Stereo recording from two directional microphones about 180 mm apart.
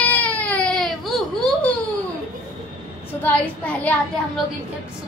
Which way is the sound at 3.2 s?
10° left (ahead or behind).